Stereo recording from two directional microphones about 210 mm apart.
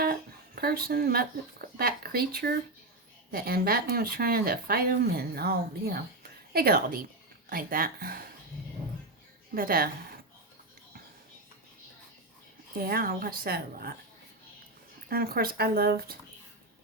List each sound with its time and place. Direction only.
0.0 s speech: 45° right (ahead or behind)
9.6 s speech: 45° right (ahead or behind)
12.7 s speech: 45° right (ahead or behind)
15.1 s speech: 45° right (ahead or behind)